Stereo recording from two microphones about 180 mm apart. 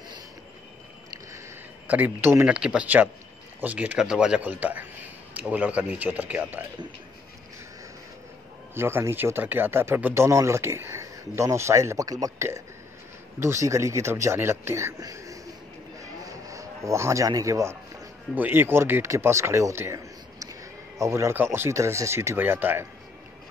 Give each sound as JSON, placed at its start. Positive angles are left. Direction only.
{"t": 1.9, "sound": "speech", "side_deg": -10}
{"t": 8.7, "sound": "speech", "side_deg": -15}
{"t": 16.0, "sound": "a sound", "side_deg": -20}
{"t": 18.3, "sound": "speech", "side_deg": -10}